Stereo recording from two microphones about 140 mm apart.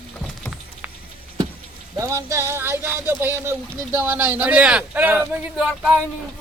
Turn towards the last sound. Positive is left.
turn(degrees=-5)  # may be behind; listen again after turning